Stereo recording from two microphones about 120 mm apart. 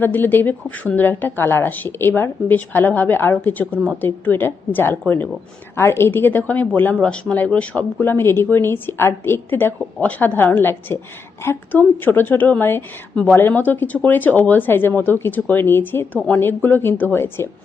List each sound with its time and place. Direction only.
0.0 s a woman's voice: 15° left (ahead or behind)